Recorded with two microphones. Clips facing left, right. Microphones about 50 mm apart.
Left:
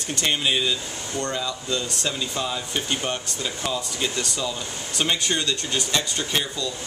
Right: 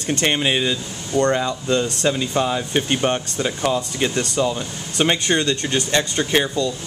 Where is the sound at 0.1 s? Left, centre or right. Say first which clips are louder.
Right 4 dB; right.